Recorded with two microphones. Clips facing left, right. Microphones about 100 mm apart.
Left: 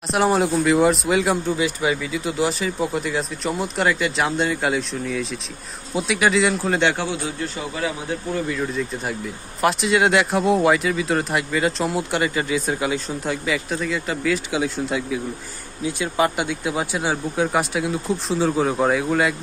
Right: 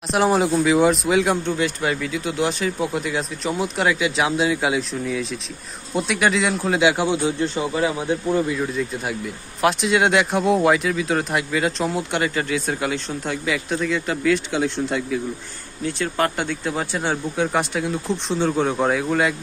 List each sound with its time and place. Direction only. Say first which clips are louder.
0.1 s speech: right 1 dB; centre (ahead or behind)
7.1 s speech: right 6 dB; 25° right (ahead or behind)
8.5 s speech: right 1 dB; centre (ahead or behind)